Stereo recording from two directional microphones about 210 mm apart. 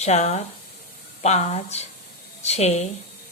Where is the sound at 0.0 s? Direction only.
30° left (ahead or behind).